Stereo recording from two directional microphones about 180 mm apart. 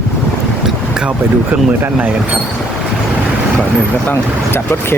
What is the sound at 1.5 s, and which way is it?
Speech, 5° right (ahead or behind).